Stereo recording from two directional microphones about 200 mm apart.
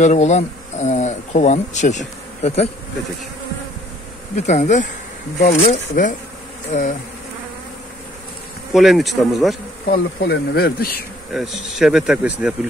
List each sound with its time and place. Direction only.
0.0 s speech: 35° left (ahead or behind)
4.4 s speech: 35° left (ahead or behind)
8.7 s speech: centre (ahead or behind)
9.8 s insect: 50° left (ahead or behind)
11.3 s speech: centre (ahead or behind)